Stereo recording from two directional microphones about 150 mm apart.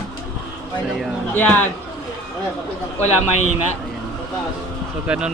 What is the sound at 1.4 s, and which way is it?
Speech, 10° left (ahead or behind).